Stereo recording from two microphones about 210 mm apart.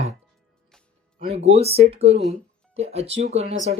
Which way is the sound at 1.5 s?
30° right (ahead or behind).